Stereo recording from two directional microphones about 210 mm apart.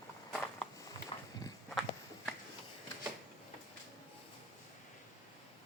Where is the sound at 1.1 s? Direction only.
30° left (ahead or behind).